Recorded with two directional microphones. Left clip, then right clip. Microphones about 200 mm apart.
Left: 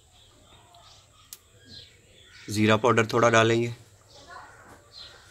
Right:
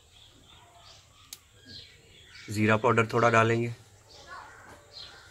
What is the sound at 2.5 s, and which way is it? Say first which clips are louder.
Speech: left 3 dB; 45° left (ahead or behind).